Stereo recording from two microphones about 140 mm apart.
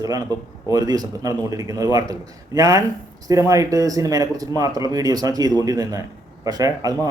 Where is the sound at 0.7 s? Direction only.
25° right (ahead or behind).